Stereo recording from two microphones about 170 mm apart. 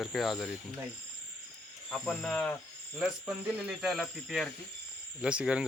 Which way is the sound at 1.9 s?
5° left (ahead or behind).